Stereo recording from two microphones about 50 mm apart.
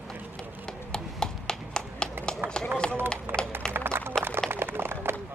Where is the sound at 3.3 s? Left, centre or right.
Right.